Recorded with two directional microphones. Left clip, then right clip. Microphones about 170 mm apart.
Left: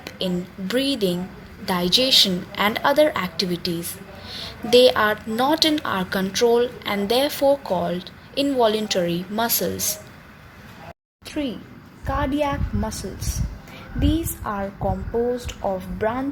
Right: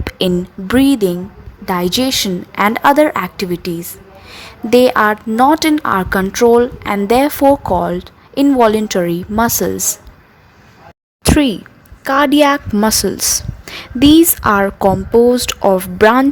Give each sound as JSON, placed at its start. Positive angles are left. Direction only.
{"t": 0.0, "sound": "a woman's voice", "side_deg": -70}
{"t": 11.2, "sound": "a sound", "side_deg": -65}
{"t": 12.0, "sound": "a woman's voice", "side_deg": -55}